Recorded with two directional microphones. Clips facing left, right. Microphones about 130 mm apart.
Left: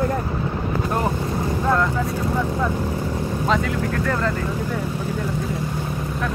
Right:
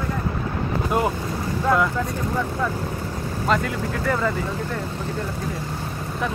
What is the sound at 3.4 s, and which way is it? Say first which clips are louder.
Speech: even; centre (ahead or behind).